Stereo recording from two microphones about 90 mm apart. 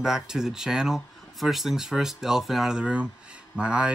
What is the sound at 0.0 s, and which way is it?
Speech, 5° right (ahead or behind).